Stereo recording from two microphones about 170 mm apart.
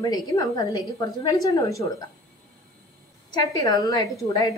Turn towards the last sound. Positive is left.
turn(degrees=20)  # may be behind; listen again after turning